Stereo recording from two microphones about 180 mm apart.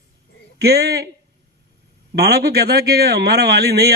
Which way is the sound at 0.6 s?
65° right (ahead or behind).